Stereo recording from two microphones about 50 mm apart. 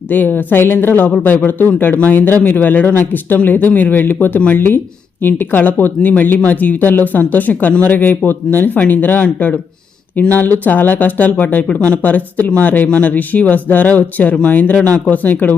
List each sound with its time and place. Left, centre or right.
0.1 s speech: left
1.1 s speech: left